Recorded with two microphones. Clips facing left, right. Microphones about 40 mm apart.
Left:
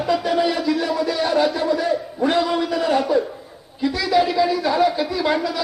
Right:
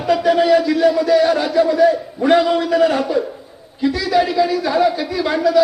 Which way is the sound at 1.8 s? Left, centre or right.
Right.